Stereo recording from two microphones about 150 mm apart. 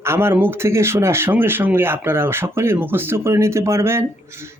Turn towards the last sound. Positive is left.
turn(degrees=-15)  # may be behind; listen again after turning